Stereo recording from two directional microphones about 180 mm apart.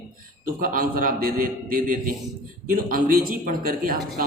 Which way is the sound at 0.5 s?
50° right (ahead or behind).